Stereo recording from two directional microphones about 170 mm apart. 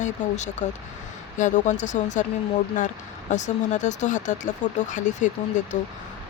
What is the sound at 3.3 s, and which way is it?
Speech, 45° left (ahead or behind).